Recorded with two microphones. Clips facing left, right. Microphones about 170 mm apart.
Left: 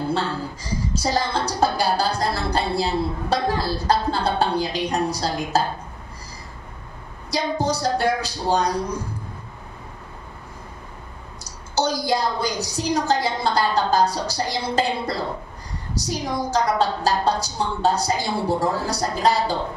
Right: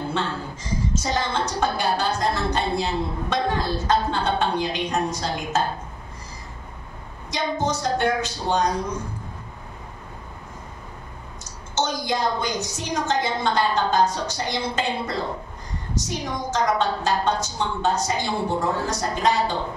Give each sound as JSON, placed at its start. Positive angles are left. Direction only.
{"t": 0.1, "sound": "a sound", "side_deg": 35}
{"t": 7.2, "sound": "a woman's voice", "side_deg": 35}
{"t": 11.4, "sound": "a woman's voice", "side_deg": 35}